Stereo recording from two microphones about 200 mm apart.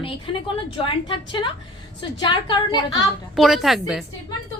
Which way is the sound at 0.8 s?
25° left (ahead or behind).